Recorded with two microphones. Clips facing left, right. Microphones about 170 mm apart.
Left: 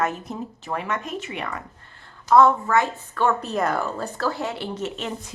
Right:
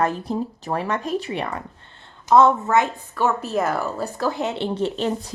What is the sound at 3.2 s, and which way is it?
Speech, 5° right (ahead or behind).